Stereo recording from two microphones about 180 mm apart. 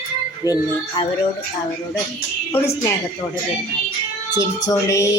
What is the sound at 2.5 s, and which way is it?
Speech, 15° left (ahead or behind).